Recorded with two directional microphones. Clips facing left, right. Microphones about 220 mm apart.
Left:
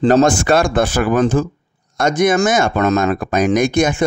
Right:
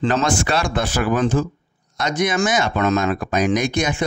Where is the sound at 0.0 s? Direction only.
40° left (ahead or behind).